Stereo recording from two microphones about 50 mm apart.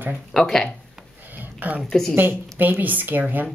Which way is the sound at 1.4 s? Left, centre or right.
Right.